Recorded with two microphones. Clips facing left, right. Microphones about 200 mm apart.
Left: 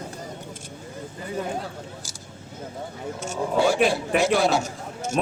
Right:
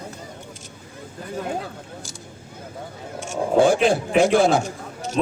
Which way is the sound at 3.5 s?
50° right (ahead or behind).